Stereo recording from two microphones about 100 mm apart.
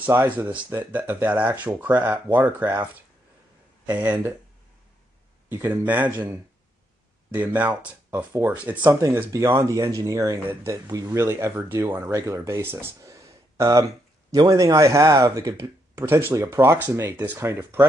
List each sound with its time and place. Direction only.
0.0 s speech: 20° right (ahead or behind)
3.8 s speech: 15° right (ahead or behind)
5.5 s speech: 20° right (ahead or behind)
7.3 s speech: 15° right (ahead or behind)
9.6 s speech: 35° right (ahead or behind)